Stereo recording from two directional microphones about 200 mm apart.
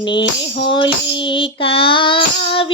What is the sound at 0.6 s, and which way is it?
Child singing, 25° left (ahead or behind).